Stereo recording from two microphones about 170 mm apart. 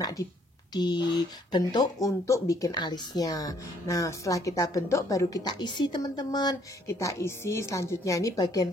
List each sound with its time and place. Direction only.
0.0 s speech: 20° left (ahead or behind)